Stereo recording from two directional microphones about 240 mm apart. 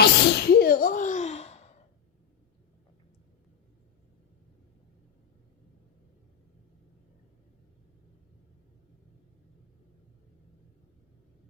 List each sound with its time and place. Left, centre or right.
0.0 s sneeze: left